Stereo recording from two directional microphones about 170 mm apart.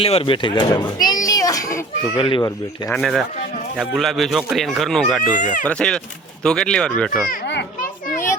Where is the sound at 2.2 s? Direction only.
30° left (ahead or behind).